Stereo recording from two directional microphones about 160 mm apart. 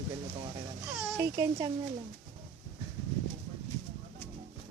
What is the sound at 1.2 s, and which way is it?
Speech, 15° right (ahead or behind).